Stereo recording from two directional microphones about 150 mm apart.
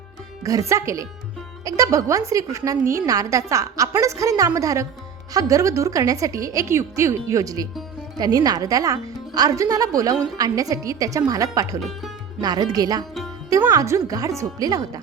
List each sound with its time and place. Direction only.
0.7 s speech: 20° right (ahead or behind)
11.8 s speech: centre (ahead or behind)
12.4 s speech: 25° right (ahead or behind)